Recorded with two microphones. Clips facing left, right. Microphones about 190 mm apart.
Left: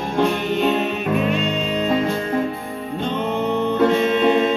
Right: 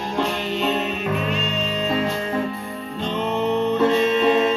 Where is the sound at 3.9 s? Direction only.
55° left (ahead or behind).